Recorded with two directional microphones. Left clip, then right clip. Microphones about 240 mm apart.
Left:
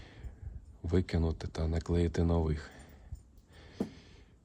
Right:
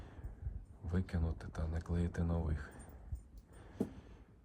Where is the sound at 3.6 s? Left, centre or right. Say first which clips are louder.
Left 3 dB; left.